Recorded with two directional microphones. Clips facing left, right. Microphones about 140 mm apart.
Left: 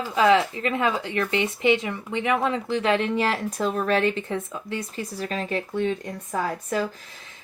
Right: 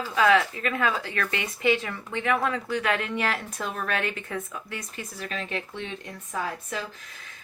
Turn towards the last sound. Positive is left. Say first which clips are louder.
# left 6 dB
turn(degrees=45)  # may be behind; listen again after turning